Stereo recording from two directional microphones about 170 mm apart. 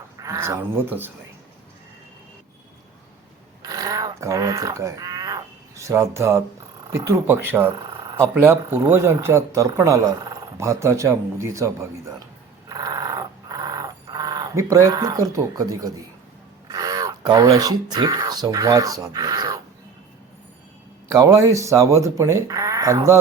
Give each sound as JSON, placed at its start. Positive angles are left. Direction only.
{"t": 0.2, "sound": "speech", "side_deg": -15}
{"t": 3.6, "sound": "a sound", "side_deg": -20}
{"t": 6.9, "sound": "speech", "side_deg": -15}
{"t": 12.6, "sound": "dog", "side_deg": -25}
{"t": 16.7, "sound": "speech", "side_deg": -20}
{"t": 21.1, "sound": "speech", "side_deg": -20}